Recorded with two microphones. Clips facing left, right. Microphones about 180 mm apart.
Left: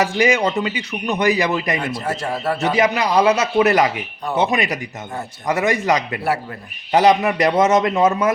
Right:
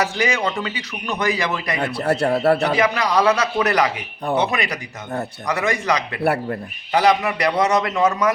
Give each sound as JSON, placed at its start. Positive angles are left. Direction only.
{"t": 0.0, "sound": "speech", "side_deg": 20}
{"t": 1.8, "sound": "a man's voice", "side_deg": -65}
{"t": 2.7, "sound": "speech", "side_deg": 20}
{"t": 5.5, "sound": "speech", "side_deg": 20}
{"t": 6.2, "sound": "a man's voice", "side_deg": -60}
{"t": 6.9, "sound": "speech", "side_deg": 25}